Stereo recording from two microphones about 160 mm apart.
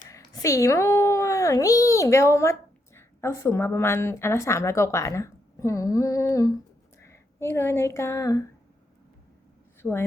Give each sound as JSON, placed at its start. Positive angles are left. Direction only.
{"t": 0.1, "sound": "a child's voice", "side_deg": 20}
{"t": 9.8, "sound": "a woman's voice", "side_deg": 5}